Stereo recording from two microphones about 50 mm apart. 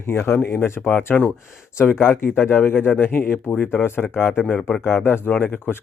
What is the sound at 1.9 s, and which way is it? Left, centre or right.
Speech, left.